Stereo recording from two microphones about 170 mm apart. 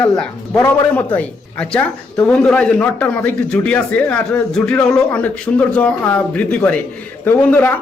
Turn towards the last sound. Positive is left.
turn(degrees=10)  # may be behind; listen again after turning